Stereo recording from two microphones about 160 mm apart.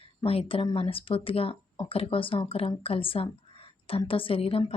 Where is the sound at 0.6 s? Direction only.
35° left (ahead or behind).